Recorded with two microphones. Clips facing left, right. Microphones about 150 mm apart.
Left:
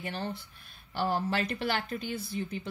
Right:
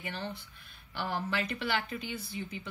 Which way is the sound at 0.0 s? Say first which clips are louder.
Left 3 dB; 40° left (ahead or behind).